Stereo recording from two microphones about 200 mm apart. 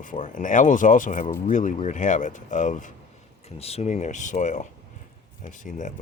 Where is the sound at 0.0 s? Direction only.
40° left (ahead or behind).